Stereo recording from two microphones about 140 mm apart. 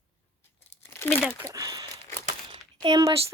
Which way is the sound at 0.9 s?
15° left (ahead or behind).